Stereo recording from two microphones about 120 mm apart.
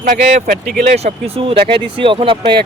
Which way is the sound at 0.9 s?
60° right (ahead or behind).